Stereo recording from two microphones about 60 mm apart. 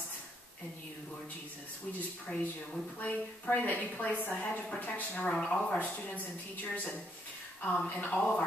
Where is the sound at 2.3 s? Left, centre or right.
Left.